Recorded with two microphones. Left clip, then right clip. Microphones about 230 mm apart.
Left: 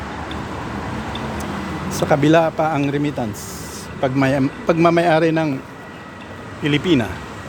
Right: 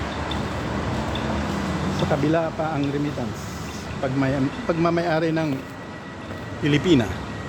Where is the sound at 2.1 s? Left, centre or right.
Left.